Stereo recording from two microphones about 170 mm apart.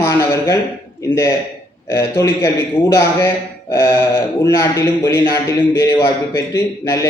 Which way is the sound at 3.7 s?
25° left (ahead or behind).